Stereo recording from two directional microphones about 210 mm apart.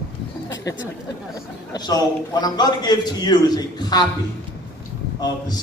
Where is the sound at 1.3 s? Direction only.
20° left (ahead or behind).